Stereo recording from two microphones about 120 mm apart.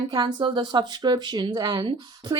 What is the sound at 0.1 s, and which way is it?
A woman's voice, 35° right (ahead or behind).